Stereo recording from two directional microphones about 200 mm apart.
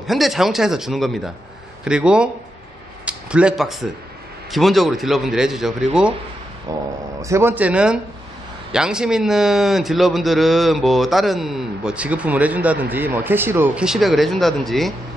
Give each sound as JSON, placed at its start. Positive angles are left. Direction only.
{"t": 0.0, "sound": "a man's voice", "side_deg": 0}
{"t": 6.7, "sound": "a man's voice", "side_deg": -15}